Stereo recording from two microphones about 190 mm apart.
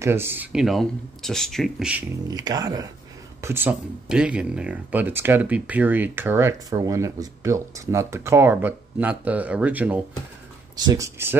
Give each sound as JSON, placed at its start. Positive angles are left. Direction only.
{"t": 0.0, "sound": "speech", "side_deg": -10}
{"t": 2.3, "sound": "speech", "side_deg": -20}
{"t": 10.8, "sound": "speech", "side_deg": -20}